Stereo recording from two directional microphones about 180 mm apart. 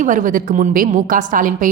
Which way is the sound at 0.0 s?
45° right (ahead or behind).